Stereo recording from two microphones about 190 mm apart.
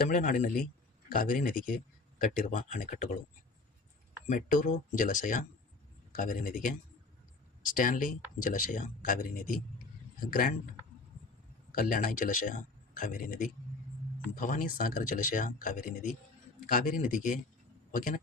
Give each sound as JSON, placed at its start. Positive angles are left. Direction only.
{"t": 0.1, "sound": "speech", "side_deg": 45}
{"t": 4.3, "sound": "speech", "side_deg": 45}
{"t": 11.7, "sound": "a man's voice", "side_deg": 45}